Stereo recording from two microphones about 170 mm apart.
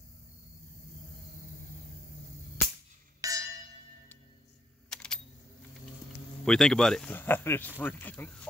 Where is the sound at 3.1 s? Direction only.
20° right (ahead or behind).